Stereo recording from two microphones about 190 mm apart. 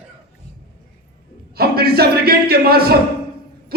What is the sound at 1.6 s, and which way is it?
A man's voice, 55° right (ahead or behind).